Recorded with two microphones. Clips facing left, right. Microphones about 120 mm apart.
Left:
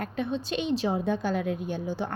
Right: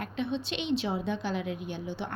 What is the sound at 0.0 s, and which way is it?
A woman's voice, 45° left (ahead or behind).